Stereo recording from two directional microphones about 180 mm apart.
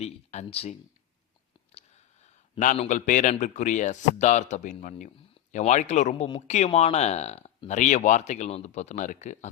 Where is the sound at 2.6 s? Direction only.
40° left (ahead or behind).